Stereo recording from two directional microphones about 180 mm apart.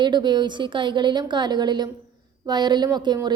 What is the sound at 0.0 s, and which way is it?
A woman's voice, 25° right (ahead or behind).